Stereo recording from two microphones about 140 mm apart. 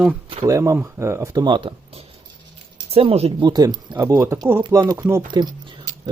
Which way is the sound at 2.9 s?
45° right (ahead or behind).